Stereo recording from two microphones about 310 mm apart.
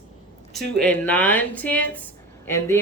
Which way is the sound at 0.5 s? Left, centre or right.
Centre.